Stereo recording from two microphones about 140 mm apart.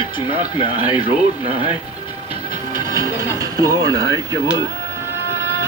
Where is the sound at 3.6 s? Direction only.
25° right (ahead or behind).